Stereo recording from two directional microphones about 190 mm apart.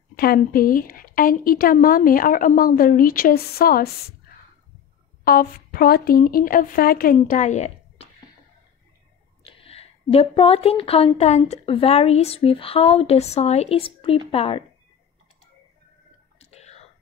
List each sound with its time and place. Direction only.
0.1 s a woman's voice: 50° left (ahead or behind)
5.2 s a woman's voice: 50° left (ahead or behind)
9.4 s a woman's voice: 30° left (ahead or behind)
16.3 s whispering: 35° left (ahead or behind)